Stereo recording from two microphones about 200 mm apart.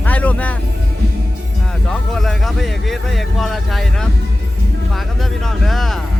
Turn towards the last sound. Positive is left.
turn(degrees=0)  # may be behind; listen again after turning